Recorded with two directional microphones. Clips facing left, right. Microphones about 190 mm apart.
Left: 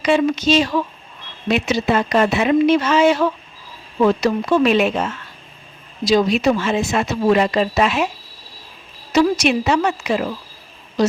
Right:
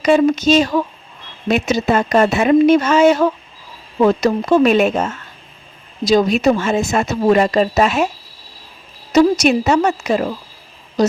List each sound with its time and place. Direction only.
0.0 s speech: 45° right (ahead or behind)
9.3 s a woman's voice: 40° right (ahead or behind)